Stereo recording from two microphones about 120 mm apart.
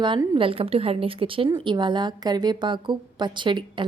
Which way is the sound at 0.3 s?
50° right (ahead or behind).